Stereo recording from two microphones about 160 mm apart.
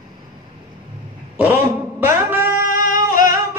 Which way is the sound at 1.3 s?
10° right (ahead or behind).